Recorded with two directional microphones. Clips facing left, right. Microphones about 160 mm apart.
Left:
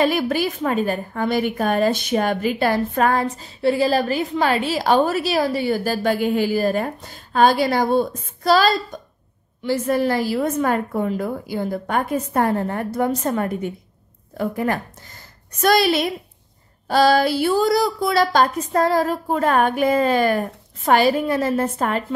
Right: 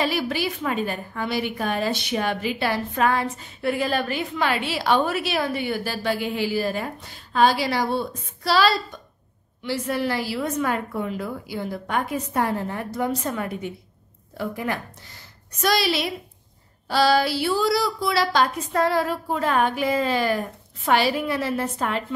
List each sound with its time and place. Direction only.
0.0 s a woman's voice: 50° left (ahead or behind)